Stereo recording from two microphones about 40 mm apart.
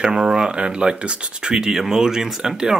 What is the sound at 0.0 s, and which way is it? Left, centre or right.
Speech, centre.